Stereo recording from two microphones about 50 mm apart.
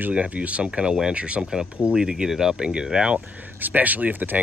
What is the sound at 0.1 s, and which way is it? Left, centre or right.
Speech, right.